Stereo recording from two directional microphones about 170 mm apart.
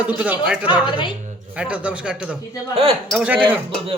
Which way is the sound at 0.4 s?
5° right (ahead or behind).